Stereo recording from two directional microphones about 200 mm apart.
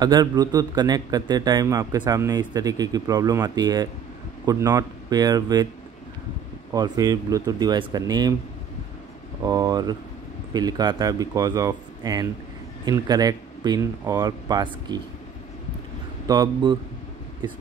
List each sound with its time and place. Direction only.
0.0 s a man's voice: 20° right (ahead or behind)
6.7 s a man's voice: 20° right (ahead or behind)
9.4 s a man's voice: 20° right (ahead or behind)
16.3 s a man's voice: 20° right (ahead or behind)